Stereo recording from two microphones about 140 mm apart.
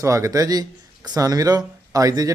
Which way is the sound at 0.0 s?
25° right (ahead or behind).